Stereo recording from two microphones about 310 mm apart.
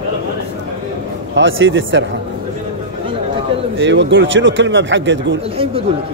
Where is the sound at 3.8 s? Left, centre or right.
Right.